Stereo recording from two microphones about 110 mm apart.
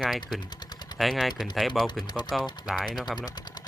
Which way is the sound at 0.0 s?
Centre (ahead or behind).